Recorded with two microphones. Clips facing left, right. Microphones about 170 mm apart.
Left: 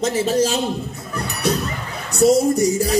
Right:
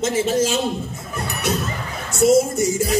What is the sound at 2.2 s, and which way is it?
Speech, 35° left (ahead or behind).